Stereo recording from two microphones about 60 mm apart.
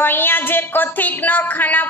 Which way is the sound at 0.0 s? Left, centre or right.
Left.